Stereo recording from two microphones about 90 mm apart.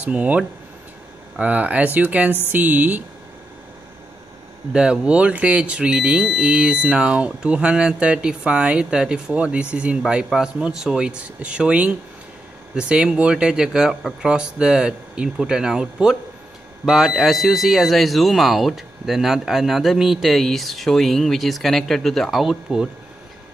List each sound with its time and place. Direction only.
0.0 s speech: 15° right (ahead or behind)
4.7 s speech: 10° right (ahead or behind)